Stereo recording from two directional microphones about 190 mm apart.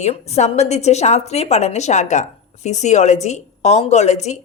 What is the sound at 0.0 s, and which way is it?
A woman's voice, 35° left (ahead or behind).